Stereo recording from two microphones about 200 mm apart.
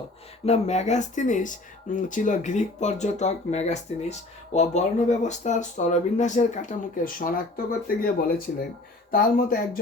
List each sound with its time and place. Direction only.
0.4 s speech: 35° left (ahead or behind)
9.1 s speech: 45° left (ahead or behind)